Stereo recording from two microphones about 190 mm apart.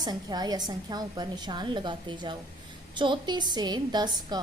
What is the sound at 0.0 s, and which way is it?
A woman's voice, 20° right (ahead or behind).